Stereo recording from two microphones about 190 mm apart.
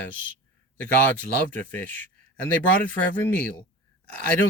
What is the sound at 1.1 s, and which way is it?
Speech, 10° left (ahead or behind).